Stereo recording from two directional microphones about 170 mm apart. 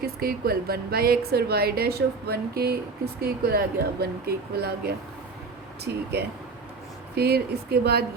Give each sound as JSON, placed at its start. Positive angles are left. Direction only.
{"t": 0.0, "sound": "a woman's voice", "side_deg": -65}